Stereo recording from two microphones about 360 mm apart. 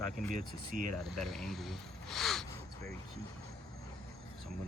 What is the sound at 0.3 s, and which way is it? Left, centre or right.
Speech, right.